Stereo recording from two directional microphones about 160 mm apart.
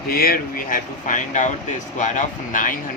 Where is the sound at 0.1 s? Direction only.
65° left (ahead or behind).